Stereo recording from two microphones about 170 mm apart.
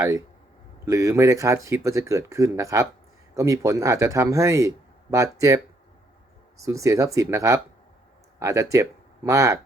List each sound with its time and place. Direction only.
0.9 s speech: 15° right (ahead or behind)
6.6 s speech: 20° right (ahead or behind)